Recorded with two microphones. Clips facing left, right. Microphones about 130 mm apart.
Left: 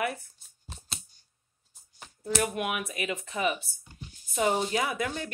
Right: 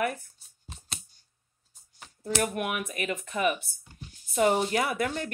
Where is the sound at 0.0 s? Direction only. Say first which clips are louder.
Right 2 dB; 45° right (ahead or behind).